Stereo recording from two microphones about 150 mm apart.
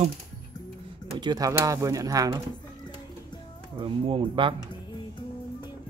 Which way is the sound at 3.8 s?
35° right (ahead or behind).